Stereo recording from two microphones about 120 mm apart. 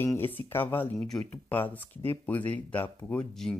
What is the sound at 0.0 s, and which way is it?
Speech, 20° left (ahead or behind).